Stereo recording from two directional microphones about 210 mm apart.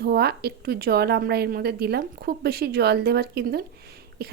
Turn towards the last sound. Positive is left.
turn(degrees=-45)  # may be behind; listen again after turning